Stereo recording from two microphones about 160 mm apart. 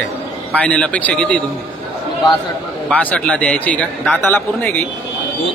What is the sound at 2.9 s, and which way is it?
Speech, 10° left (ahead or behind).